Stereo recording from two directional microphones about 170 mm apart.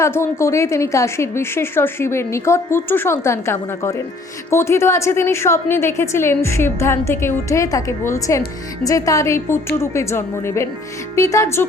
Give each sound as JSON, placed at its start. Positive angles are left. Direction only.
{"t": 0.0, "sound": "a woman's voice", "side_deg": 15}